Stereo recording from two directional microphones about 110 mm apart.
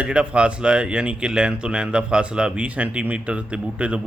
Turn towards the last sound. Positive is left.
turn(degrees=-10)  # may be behind; listen again after turning